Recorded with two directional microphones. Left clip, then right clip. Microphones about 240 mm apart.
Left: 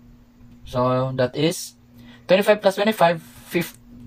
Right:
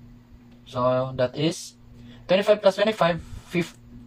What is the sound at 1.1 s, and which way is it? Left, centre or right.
Speech, left.